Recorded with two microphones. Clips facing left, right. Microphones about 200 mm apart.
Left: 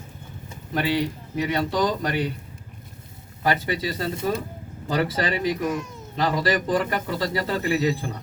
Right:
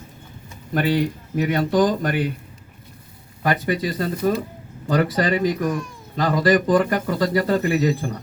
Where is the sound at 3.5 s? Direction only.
50° right (ahead or behind).